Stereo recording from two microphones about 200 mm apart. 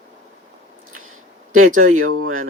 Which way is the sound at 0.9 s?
90° right.